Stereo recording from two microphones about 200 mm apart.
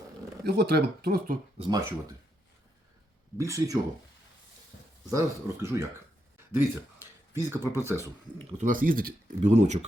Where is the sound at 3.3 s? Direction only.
15° right (ahead or behind).